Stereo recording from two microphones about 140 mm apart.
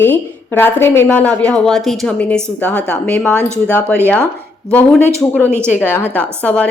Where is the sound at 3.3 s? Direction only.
20° right (ahead or behind).